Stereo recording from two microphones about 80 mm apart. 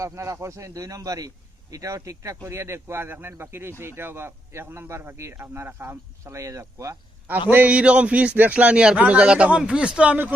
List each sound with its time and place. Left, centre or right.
0.0 s speech: right
7.5 s a man's voice: centre